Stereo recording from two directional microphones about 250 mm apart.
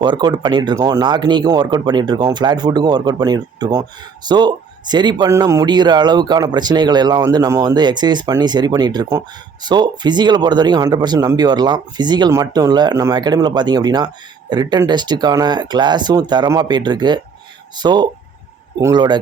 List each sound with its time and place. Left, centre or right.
0.0 s speech: centre